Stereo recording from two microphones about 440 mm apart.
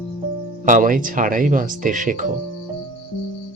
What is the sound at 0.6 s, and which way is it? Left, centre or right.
Speech, centre.